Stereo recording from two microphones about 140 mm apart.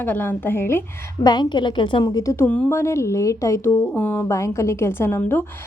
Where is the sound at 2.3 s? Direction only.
15° left (ahead or behind).